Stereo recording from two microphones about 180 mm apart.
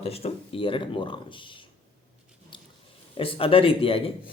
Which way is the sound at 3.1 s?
30° left (ahead or behind).